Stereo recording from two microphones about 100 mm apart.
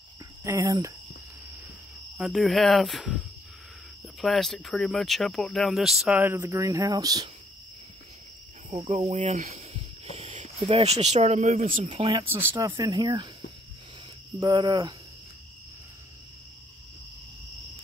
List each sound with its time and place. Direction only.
0.4 s speech: 30° right (ahead or behind)
2.1 s speech: centre (ahead or behind)
4.2 s speech: centre (ahead or behind)
6.3 s speech: 35° right (ahead or behind)
8.6 s cricket: 90° right
10.7 s speech: 90° right
12.5 s speech: 45° right (ahead or behind)
14.5 s speech: 50° right (ahead or behind)